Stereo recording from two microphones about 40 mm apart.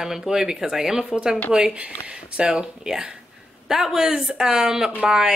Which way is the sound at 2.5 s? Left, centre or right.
Centre.